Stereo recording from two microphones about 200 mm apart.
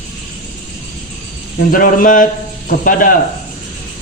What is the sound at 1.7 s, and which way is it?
A man's voice, 45° left (ahead or behind).